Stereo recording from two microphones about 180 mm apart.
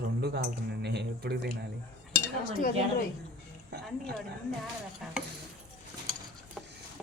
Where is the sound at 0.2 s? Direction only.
65° right (ahead or behind).